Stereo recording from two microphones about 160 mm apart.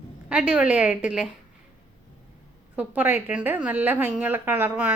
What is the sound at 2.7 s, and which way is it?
A woman's voice, 10° right (ahead or behind).